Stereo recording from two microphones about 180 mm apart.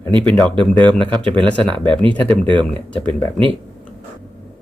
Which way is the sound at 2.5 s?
25° right (ahead or behind).